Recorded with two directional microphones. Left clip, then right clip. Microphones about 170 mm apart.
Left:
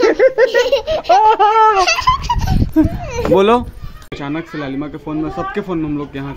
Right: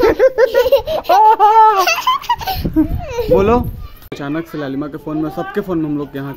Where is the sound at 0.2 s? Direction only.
20° right (ahead or behind); by 2.5 s 40° right (ahead or behind).